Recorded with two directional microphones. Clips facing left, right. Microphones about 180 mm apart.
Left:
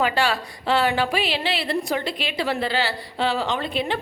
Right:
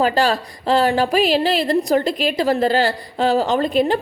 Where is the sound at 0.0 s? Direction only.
40° right (ahead or behind).